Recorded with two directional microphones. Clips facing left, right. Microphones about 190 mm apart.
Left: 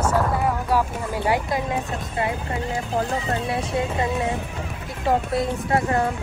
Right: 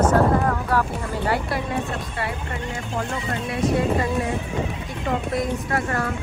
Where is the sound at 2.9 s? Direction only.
35° left (ahead or behind).